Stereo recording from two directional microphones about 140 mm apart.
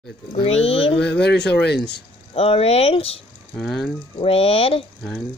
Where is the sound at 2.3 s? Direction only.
45° left (ahead or behind).